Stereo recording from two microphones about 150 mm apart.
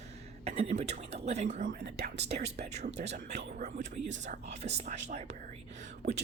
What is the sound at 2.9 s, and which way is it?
Speech, 45° right (ahead or behind).